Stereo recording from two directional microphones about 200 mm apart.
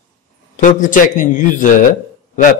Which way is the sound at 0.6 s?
40° left (ahead or behind).